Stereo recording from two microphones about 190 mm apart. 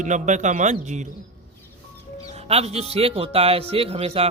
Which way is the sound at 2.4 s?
35° right (ahead or behind).